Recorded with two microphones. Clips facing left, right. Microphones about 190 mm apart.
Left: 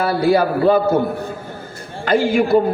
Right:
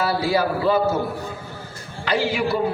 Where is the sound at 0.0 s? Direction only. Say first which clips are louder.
Left 5 dB; 55° left (ahead or behind).